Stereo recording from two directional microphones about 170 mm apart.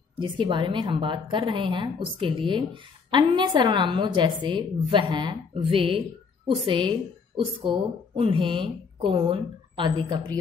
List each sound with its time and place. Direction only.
0.2 s speech: 30° right (ahead or behind)